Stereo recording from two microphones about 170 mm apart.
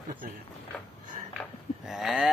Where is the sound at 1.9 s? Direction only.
Centre (ahead or behind).